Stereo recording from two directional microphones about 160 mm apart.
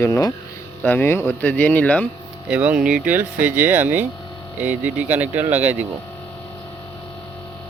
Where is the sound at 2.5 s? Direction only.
10° right (ahead or behind).